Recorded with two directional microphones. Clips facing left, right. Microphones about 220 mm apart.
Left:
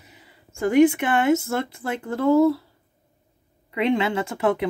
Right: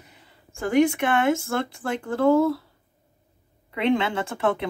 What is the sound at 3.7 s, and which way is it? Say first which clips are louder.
Speech: left 1 dB; 5° left (ahead or behind).